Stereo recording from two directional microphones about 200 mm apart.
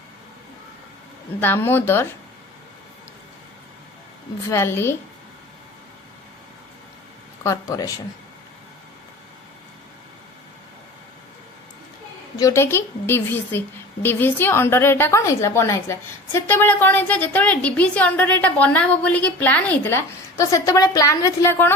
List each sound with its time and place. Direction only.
1.4 s a woman's voice: 10° left (ahead or behind)
4.4 s a woman's voice: 10° left (ahead or behind)
7.4 s a woman's voice: 15° left (ahead or behind)
12.4 s a woman's voice: 15° left (ahead or behind)